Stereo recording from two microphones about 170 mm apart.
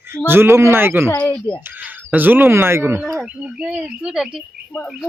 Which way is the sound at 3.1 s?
5° right (ahead or behind).